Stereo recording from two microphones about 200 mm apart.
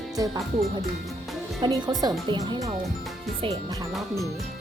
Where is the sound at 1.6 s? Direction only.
20° right (ahead or behind).